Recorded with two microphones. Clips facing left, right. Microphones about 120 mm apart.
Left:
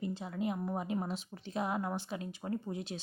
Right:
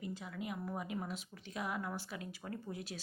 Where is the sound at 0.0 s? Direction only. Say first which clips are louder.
Left 7 dB; 30° left (ahead or behind).